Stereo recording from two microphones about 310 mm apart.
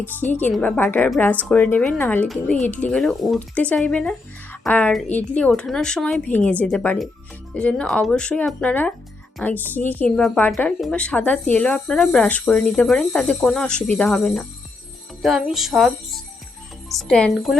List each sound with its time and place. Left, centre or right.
0.0 s a woman's voice: centre